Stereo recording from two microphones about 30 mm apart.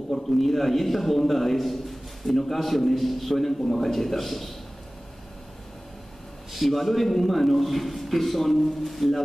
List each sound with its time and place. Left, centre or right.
0.1 s a man's voice: centre
6.5 s a man's voice: centre